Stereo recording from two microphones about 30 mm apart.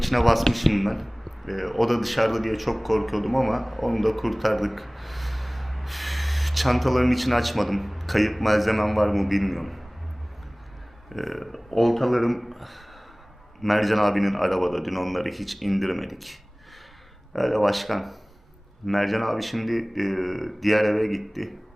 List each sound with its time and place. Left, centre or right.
0.0 s a man's voice: centre
11.1 s a man's voice: centre